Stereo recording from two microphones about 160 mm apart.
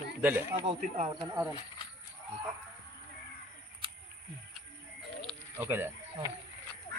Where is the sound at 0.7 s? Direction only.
50° right (ahead or behind).